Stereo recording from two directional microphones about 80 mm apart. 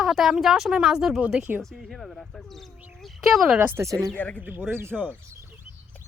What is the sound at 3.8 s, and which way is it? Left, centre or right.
Speech, right.